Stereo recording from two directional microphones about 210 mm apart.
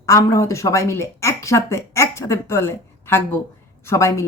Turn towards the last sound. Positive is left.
turn(degrees=15)  # may be behind; listen again after turning